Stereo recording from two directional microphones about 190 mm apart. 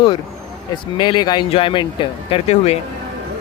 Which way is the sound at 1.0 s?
25° left (ahead or behind).